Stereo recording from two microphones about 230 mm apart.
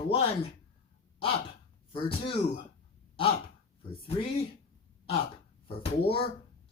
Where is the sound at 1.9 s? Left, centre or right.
Left.